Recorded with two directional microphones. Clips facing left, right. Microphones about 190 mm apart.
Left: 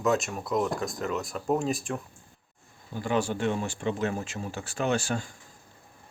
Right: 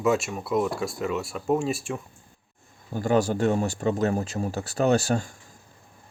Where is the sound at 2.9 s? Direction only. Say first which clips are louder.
Right 5 dB; 40° right (ahead or behind).